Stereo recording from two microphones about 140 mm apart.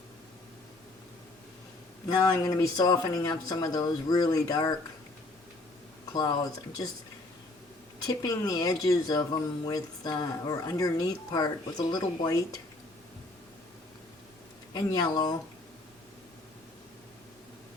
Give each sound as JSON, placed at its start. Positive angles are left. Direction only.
{"t": 2.0, "sound": "speech", "side_deg": 25}
{"t": 6.1, "sound": "speech", "side_deg": 25}
{"t": 8.0, "sound": "speech", "side_deg": 25}
{"t": 14.7, "sound": "speech", "side_deg": 30}